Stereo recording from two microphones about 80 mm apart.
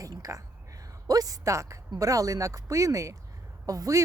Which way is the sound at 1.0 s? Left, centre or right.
Right.